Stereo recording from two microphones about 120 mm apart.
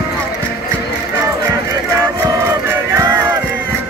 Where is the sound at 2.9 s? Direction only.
25° right (ahead or behind).